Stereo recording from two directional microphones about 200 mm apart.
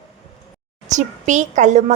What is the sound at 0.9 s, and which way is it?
A woman's voice, 35° right (ahead or behind).